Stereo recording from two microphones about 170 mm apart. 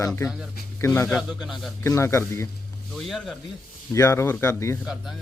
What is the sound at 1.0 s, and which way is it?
Speech, centre (ahead or behind).